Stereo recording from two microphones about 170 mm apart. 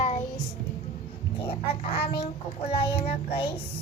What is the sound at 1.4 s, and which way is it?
Child singing, 35° left (ahead or behind).